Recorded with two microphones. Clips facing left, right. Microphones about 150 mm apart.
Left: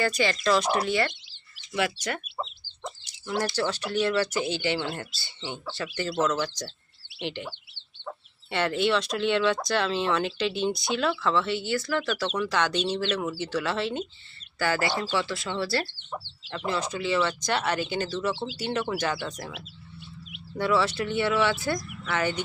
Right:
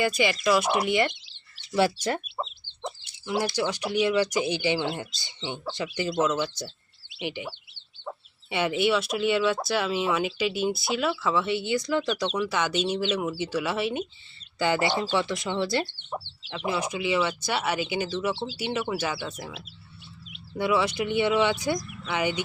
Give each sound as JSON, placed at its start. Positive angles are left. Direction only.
{"t": 0.4, "sound": "speech", "side_deg": -10}
{"t": 1.7, "sound": "speech", "side_deg": -30}
{"t": 3.2, "sound": "speech", "side_deg": -5}
{"t": 20.6, "sound": "speech", "side_deg": -15}